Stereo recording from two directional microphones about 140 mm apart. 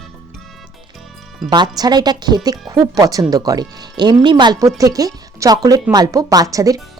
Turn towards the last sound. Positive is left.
turn(degrees=-25)  # may be behind; listen again after turning